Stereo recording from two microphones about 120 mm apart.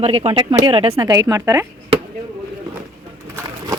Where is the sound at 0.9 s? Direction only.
25° right (ahead or behind).